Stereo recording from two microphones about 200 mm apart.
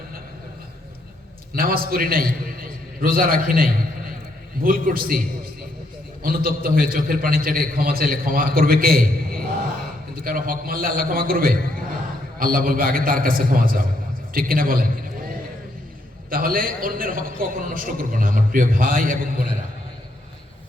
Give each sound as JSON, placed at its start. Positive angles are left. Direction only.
{"t": 1.5, "sound": "a man's voice", "side_deg": -45}
{"t": 6.2, "sound": "a man's voice", "side_deg": -45}
{"t": 16.3, "sound": "a man's voice", "side_deg": -45}